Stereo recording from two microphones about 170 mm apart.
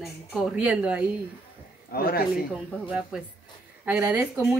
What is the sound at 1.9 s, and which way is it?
Speech, 60° left (ahead or behind).